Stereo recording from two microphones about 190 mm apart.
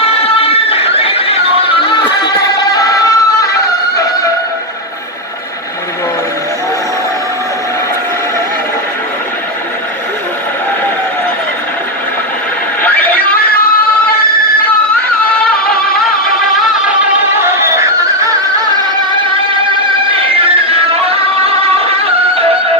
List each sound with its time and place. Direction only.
0.4 s a sound: 30° left (ahead or behind)
1.9 s music: 25° left (ahead or behind)
20.1 s music: 30° right (ahead or behind)